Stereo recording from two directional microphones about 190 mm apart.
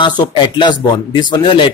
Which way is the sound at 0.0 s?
25° left (ahead or behind).